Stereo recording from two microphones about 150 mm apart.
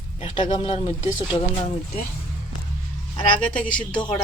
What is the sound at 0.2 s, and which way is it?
Speech, 35° left (ahead or behind).